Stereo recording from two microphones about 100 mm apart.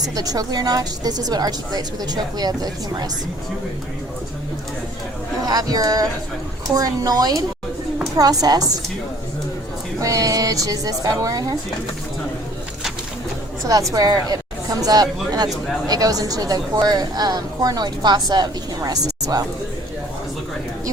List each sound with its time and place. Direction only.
0.2 s a woman's voice: 40° right (ahead or behind)
5.5 s a woman's voice: 35° right (ahead or behind)
10.0 s a woman's voice: 35° right (ahead or behind)
13.9 s speech: 40° right (ahead or behind)
15.4 s speech: 5° left (ahead or behind)
15.9 s a woman's voice: 35° right (ahead or behind)